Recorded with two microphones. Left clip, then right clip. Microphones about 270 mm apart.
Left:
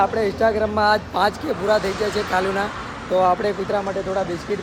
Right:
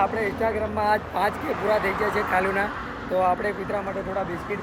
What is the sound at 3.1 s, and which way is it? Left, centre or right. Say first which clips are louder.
Speech: left 5 dB; centre.